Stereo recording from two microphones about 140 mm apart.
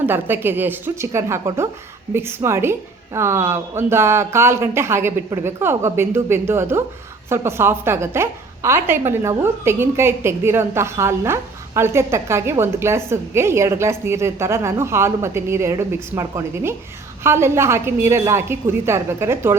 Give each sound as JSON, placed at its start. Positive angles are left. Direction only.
{"t": 0.0, "sound": "a woman's voice", "side_deg": -15}